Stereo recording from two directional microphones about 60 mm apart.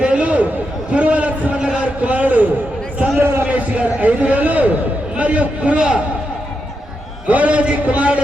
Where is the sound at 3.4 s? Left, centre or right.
Right.